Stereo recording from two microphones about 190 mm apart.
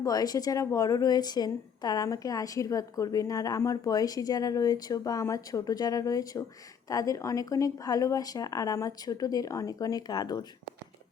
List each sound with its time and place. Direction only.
0.0 s a woman's voice: 20° left (ahead or behind)